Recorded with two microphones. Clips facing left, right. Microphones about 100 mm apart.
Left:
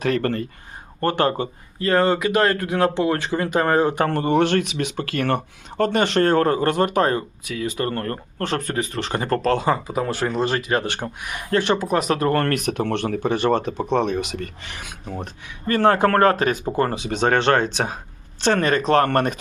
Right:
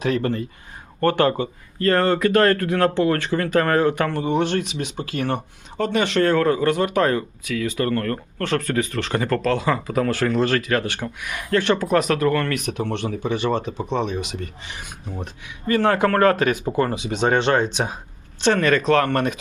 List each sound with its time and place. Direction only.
0.0 s speech: 50° left (ahead or behind)
1.0 s speech: 30° left (ahead or behind)
1.8 s speech: 15° left (ahead or behind)
4.1 s speech: 60° left (ahead or behind); by 9.7 s 30° left (ahead or behind)
9.8 s speech: 15° left (ahead or behind)
11.6 s speech: 15° left (ahead or behind)
12.3 s speech: 45° left (ahead or behind); by 15.1 s 65° left (ahead or behind)
15.2 s speech: 45° left (ahead or behind)